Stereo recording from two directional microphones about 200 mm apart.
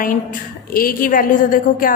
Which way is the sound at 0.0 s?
45° left (ahead or behind).